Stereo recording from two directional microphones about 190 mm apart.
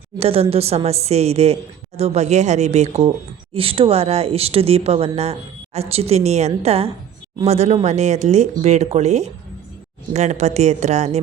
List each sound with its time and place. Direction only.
0.2 s speech: 30° right (ahead or behind)